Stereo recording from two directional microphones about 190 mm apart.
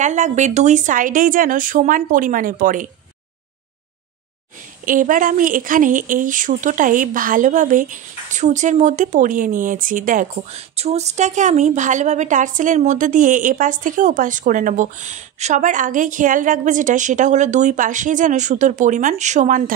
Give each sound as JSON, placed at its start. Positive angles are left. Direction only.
{"t": 0.0, "sound": "speech", "side_deg": -40}
{"t": 4.8, "sound": "speech", "side_deg": -45}